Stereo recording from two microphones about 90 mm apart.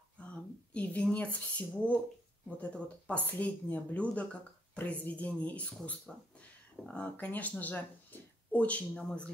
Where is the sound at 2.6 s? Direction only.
15° left (ahead or behind).